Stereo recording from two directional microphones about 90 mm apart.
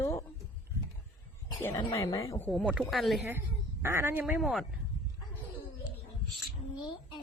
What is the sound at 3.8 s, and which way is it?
Speech, 25° right (ahead or behind).